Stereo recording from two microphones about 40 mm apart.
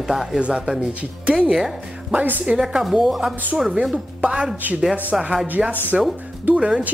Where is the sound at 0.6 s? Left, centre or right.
Centre.